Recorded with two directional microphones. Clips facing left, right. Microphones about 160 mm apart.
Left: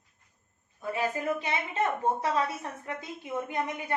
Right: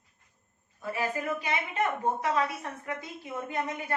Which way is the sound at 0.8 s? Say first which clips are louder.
Left 2 dB; 20° left (ahead or behind).